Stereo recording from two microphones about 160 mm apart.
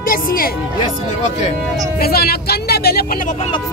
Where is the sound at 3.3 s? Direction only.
40° left (ahead or behind).